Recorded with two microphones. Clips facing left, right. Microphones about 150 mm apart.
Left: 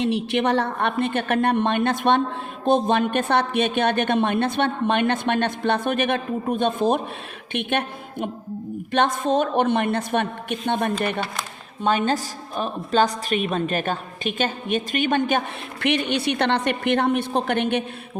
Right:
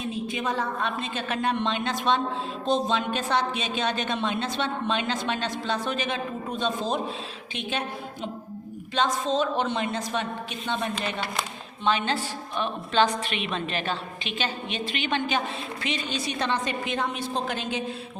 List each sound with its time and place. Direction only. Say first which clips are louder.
0.0 s a woman's voice: left 8 dB; 80° left; by 11.2 s 55° left (ahead or behind)
11.8 s a woman's voice: left 4 dB; 45° left (ahead or behind); by 17.8 s 65° left (ahead or behind)